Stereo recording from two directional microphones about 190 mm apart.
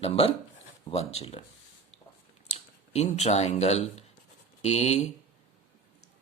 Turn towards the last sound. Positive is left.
turn(degrees=35)  # may be behind; listen again after turning